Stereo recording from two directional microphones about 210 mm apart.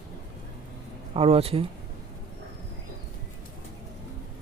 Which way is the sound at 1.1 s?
25° right (ahead or behind).